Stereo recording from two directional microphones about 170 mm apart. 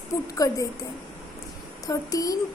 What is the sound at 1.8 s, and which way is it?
Speech, 20° left (ahead or behind).